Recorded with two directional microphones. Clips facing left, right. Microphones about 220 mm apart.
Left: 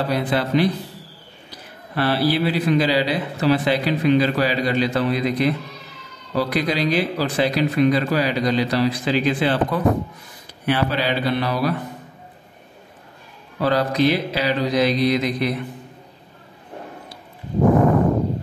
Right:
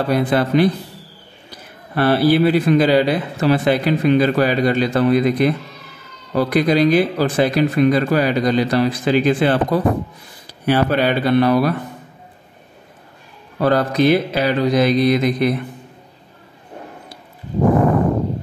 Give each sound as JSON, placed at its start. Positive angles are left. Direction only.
{"t": 0.1, "sound": "a man's voice", "side_deg": -50}
{"t": 2.0, "sound": "a man's voice", "side_deg": -50}
{"t": 13.6, "sound": "a man's voice", "side_deg": -50}